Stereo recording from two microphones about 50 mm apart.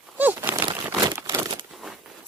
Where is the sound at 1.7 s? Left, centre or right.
Centre.